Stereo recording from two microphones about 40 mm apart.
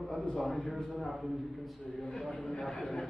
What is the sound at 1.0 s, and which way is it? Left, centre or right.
A man's voice, centre.